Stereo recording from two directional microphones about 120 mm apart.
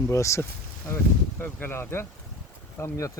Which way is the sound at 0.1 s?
25° left (ahead or behind).